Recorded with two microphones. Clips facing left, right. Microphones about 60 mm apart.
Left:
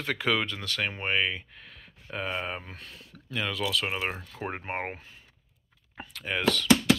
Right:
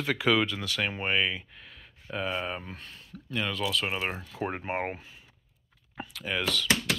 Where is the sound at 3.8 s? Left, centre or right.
Left.